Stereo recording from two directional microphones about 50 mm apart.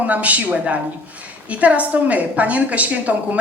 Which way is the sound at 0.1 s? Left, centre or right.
Right.